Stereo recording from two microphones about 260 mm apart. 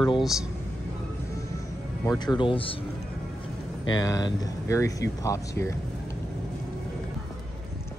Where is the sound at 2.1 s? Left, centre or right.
Centre.